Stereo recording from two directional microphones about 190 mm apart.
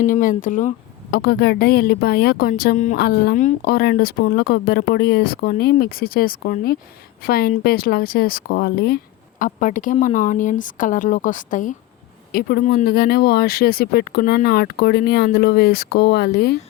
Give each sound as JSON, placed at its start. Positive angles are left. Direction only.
{"t": 0.0, "sound": "a woman's voice", "side_deg": 45}
{"t": 1.1, "sound": "a woman's voice", "side_deg": 55}
{"t": 3.0, "sound": "a woman's voice", "side_deg": 55}
{"t": 9.4, "sound": "a woman's voice", "side_deg": 45}
{"t": 12.3, "sound": "speech", "side_deg": 55}